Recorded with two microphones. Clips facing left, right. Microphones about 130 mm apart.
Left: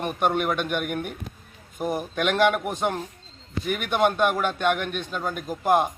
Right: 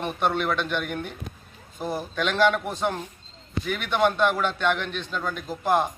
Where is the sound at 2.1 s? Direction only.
50° left (ahead or behind).